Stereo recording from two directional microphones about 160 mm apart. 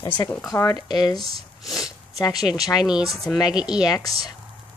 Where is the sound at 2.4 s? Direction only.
Centre (ahead or behind).